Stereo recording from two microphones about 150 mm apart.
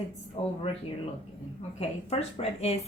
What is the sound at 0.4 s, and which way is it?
Speech, 40° left (ahead or behind).